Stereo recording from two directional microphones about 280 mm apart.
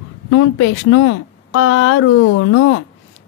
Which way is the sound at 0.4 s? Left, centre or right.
Left.